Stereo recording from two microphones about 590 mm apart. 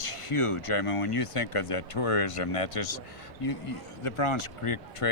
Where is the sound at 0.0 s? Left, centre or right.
Left.